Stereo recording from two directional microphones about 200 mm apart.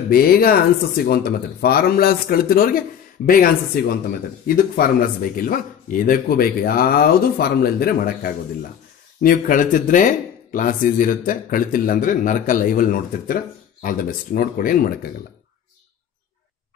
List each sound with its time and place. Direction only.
0.1 s speech: 45° left (ahead or behind)
5.3 s speech: 40° left (ahead or behind)